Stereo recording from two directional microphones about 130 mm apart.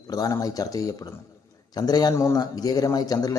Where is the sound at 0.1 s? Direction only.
25° left (ahead or behind).